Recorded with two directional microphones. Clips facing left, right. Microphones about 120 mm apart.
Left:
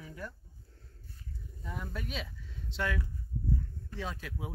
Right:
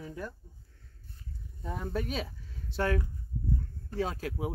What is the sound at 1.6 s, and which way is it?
Speech, 35° right (ahead or behind).